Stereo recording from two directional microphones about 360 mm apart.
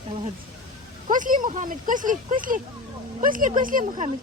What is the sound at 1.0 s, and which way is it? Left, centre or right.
Speech, right.